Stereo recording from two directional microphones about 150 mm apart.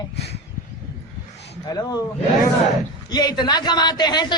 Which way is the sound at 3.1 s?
30° left (ahead or behind).